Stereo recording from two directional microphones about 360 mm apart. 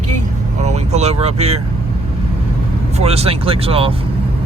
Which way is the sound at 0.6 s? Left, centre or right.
Centre.